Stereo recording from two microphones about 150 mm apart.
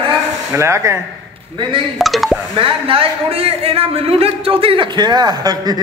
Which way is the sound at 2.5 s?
35° right (ahead or behind).